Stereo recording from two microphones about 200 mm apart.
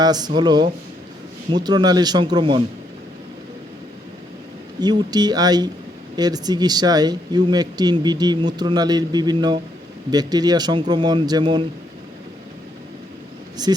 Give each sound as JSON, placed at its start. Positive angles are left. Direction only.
{"t": 0.0, "sound": "speech", "side_deg": -20}
{"t": 4.8, "sound": "speech", "side_deg": -20}
{"t": 13.6, "sound": "speech", "side_deg": -20}